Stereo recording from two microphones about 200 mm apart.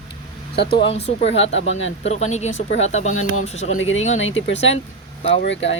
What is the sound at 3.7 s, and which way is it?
Speech, 75° left (ahead or behind).